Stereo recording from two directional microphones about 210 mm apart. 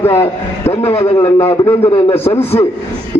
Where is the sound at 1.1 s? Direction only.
10° left (ahead or behind).